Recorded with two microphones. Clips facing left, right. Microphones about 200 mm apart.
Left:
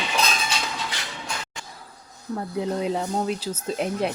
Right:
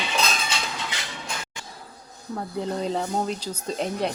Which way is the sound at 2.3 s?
5° left (ahead or behind).